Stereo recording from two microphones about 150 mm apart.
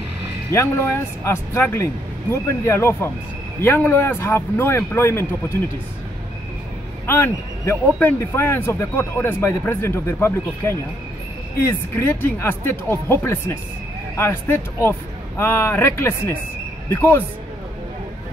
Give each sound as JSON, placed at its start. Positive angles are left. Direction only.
{"t": 0.5, "sound": "a man's voice", "side_deg": 20}
{"t": 7.1, "sound": "a man's voice", "side_deg": 15}